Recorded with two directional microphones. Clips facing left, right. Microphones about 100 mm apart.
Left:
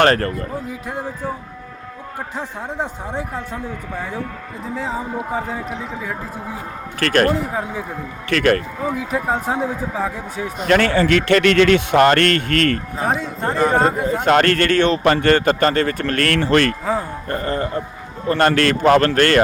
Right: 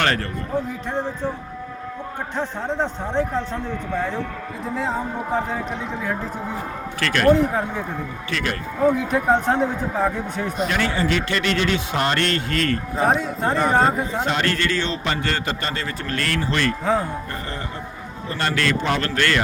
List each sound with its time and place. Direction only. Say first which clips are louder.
0.0 s a man's voice: left 7 dB; 40° left (ahead or behind)
0.7 s a man's voice: right 2 dB; 10° left (ahead or behind)
2.3 s a man's voice: right 3 dB; 10° left (ahead or behind)
4.6 s a man's voice: even; centre (ahead or behind)
7.0 s a man's voice: left 6 dB; 45° left (ahead or behind)
7.3 s a man's voice: right 2 dB; 5° left (ahead or behind)
8.3 s a man's voice: left 11 dB; 60° left (ahead or behind)
8.8 s a man's voice: right 3 dB; centre (ahead or behind)
10.7 s a man's voice: left 11 dB; 65° left (ahead or behind)
13.0 s a man's voice: right 1 dB; centre (ahead or behind)
14.3 s a man's voice: left 11 dB; 55° left (ahead or behind)
17.2 s a man's voice: left 8 dB; 45° left (ahead or behind)